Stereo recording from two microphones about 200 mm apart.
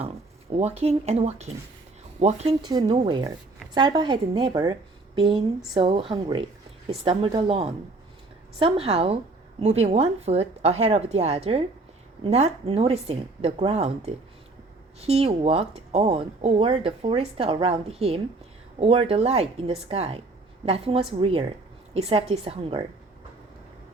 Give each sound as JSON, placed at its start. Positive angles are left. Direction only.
{"t": 0.5, "sound": "speech", "side_deg": -30}
{"t": 2.6, "sound": "speech", "side_deg": -20}